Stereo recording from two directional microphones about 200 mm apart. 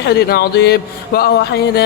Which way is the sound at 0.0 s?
50° left (ahead or behind).